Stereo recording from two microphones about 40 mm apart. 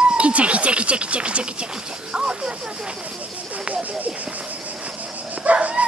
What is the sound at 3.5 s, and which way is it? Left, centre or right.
Snake, right.